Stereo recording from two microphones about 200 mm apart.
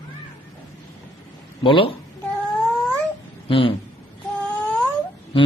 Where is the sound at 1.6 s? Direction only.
25° left (ahead or behind).